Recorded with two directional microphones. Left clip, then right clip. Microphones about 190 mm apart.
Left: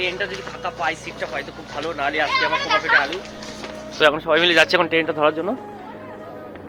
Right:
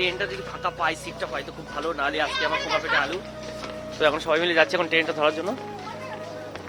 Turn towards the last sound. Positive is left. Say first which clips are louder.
# left 4 dB
turn(degrees=0)  # may be behind; listen again after turning